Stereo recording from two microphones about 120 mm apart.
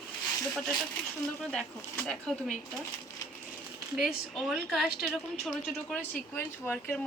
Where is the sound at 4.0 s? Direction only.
Centre (ahead or behind).